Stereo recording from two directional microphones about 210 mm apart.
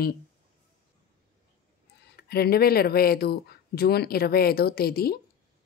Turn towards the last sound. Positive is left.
turn(degrees=45)  # may be behind; listen again after turning